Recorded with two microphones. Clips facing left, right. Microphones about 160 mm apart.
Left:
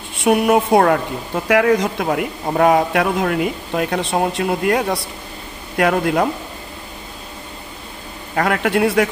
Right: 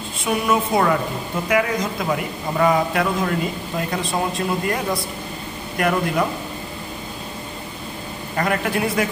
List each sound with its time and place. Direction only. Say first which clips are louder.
0.2 s a woman's voice: left 6 dB; 65° left (ahead or behind)
8.4 s a man's voice: left 5 dB; 65° left (ahead or behind)